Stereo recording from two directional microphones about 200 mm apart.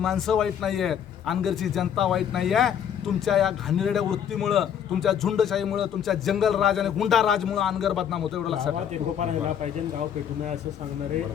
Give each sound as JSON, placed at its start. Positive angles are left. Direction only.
{"t": 0.0, "sound": "a man's voice", "side_deg": 0}
{"t": 9.1, "sound": "speech", "side_deg": -35}